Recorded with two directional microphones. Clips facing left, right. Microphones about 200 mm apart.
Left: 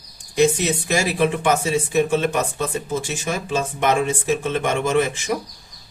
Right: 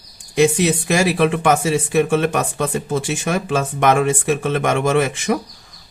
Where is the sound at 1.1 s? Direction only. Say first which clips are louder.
Right 3 dB; 70° right (ahead or behind).